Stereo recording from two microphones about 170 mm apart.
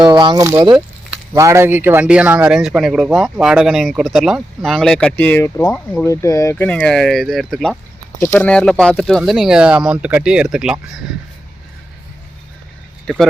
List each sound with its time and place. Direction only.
0.0 s speech: 25° right (ahead or behind); by 11.0 s 5° right (ahead or behind)
13.1 s speech: 5° left (ahead or behind)